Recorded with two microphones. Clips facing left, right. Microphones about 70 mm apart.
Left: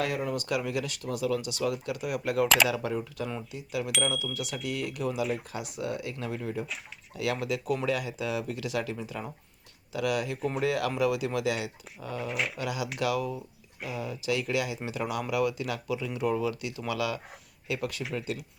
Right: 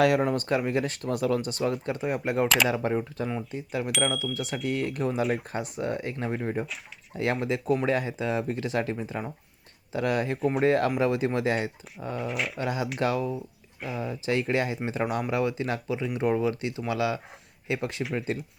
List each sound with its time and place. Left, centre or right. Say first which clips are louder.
0.0 s speech: right 9 dB; right
0.3 s speech: right 4 dB; right
12.1 s speech: right 1 dB; centre
12.5 s speech: right 3 dB; right